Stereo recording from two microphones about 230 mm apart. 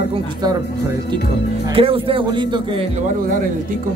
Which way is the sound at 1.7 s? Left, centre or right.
Right.